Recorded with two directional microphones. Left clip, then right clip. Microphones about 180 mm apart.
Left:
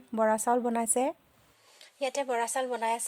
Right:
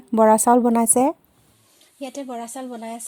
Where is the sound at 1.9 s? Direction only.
20° left (ahead or behind).